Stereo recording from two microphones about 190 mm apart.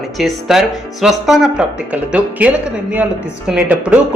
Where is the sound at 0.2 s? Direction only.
Centre (ahead or behind).